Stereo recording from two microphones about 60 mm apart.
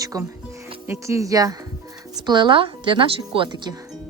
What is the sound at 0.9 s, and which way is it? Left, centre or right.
Speech, right.